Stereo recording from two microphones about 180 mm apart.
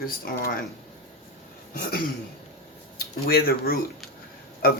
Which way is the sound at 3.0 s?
55° left (ahead or behind).